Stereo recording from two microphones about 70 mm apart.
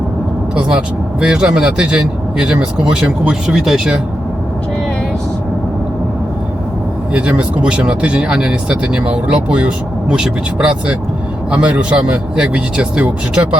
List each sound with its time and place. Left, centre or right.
0.5 s speech: centre
7.1 s speech: centre